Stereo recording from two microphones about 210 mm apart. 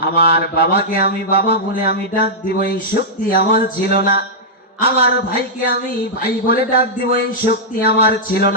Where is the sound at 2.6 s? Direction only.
45° left (ahead or behind).